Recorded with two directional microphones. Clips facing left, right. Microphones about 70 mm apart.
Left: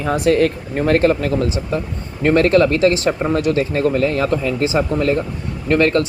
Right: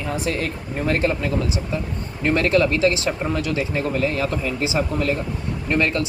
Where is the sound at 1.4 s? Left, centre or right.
Left.